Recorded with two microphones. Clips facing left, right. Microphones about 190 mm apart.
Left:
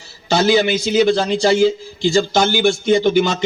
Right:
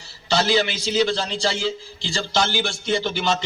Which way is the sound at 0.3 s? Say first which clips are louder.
Left 6 dB; 50° left (ahead or behind).